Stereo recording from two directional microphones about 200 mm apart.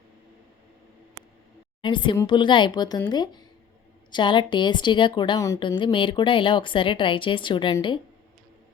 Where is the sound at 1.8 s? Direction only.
25° left (ahead or behind).